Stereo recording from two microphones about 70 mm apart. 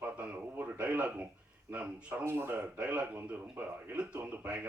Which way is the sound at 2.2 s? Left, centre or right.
Right.